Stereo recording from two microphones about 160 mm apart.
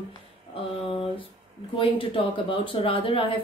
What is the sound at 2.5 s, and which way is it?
Speech, 35° left (ahead or behind).